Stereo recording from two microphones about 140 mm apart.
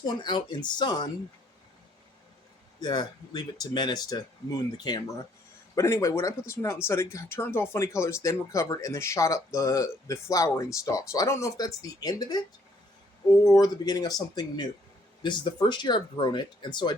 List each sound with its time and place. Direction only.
0.2 s speech: 30° left (ahead or behind)
2.8 s speech: 30° left (ahead or behind)
13.4 s speech: 25° left (ahead or behind)